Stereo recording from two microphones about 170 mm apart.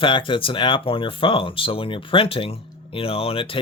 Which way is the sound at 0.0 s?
30° left (ahead or behind).